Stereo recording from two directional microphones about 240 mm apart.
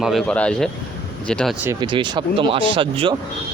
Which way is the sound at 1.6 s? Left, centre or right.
Centre.